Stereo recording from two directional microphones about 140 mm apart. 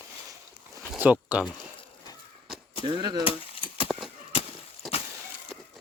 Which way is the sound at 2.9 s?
30° right (ahead or behind).